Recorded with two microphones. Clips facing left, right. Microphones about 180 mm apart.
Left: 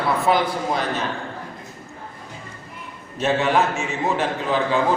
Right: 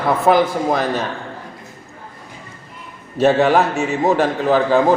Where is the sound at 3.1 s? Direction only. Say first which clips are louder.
Right 6 dB; 40° right (ahead or behind).